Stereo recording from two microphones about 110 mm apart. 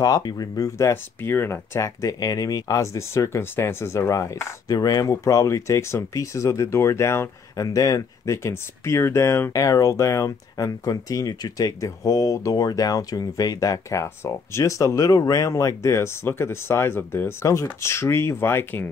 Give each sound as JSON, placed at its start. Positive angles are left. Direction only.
{"t": 0.0, "sound": "speech", "side_deg": 35}